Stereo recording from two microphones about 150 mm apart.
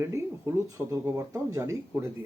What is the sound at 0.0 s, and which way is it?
Speech, 20° right (ahead or behind).